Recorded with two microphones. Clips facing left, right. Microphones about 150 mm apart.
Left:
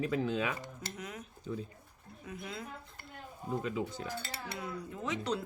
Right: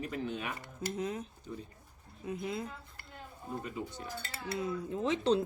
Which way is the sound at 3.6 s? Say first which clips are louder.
Left 4 dB; 90° left.